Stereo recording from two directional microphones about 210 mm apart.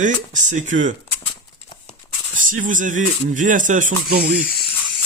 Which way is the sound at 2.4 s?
40° right (ahead or behind).